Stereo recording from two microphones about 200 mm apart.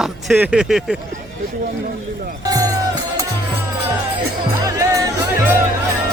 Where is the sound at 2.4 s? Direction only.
15° right (ahead or behind).